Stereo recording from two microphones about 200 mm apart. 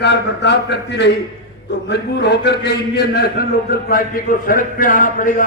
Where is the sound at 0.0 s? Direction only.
60° left (ahead or behind).